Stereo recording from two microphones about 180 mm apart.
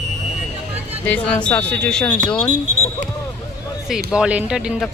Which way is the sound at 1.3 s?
5° left (ahead or behind).